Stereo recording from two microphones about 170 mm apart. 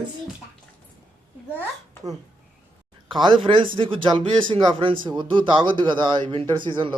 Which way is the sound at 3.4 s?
30° right (ahead or behind).